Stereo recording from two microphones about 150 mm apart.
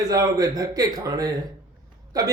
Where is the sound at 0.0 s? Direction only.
25° right (ahead or behind).